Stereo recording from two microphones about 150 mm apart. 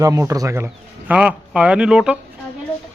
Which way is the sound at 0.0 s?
20° right (ahead or behind).